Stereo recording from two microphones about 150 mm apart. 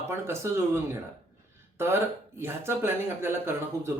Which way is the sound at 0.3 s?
15° right (ahead or behind).